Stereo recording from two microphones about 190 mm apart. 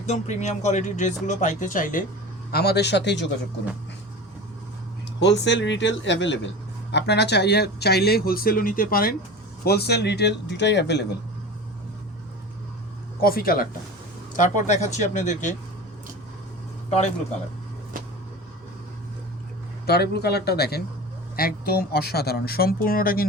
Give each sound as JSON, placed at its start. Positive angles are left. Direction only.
{"t": 0.0, "sound": "speech", "side_deg": 35}
{"t": 2.5, "sound": "speech", "side_deg": 55}
{"t": 5.2, "sound": "speech", "side_deg": 70}
{"t": 13.2, "sound": "speech", "side_deg": 50}
{"t": 19.9, "sound": "speech", "side_deg": 60}